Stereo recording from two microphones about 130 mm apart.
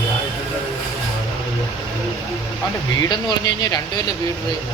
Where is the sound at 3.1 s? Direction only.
35° left (ahead or behind).